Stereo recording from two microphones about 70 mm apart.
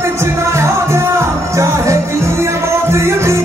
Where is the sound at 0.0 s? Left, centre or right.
Right.